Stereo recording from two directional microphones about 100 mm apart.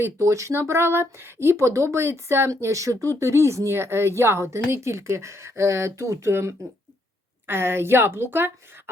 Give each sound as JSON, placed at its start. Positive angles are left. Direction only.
{"t": 0.0, "sound": "speech", "side_deg": -30}